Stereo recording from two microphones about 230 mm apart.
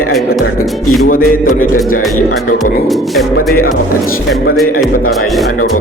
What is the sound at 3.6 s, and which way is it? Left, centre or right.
Speech, left.